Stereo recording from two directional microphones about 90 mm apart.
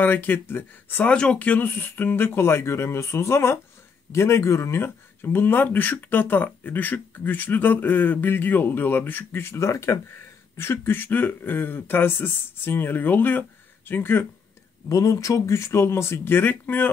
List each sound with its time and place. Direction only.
0.0 s speech: 20° left (ahead or behind)
14.9 s speech: 35° left (ahead or behind); by 16.9 s 20° left (ahead or behind)